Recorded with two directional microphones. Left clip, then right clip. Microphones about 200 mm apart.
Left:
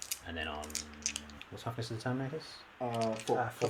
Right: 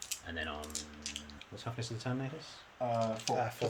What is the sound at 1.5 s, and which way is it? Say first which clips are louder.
Speech: left 2 dB; 10° left (ahead or behind).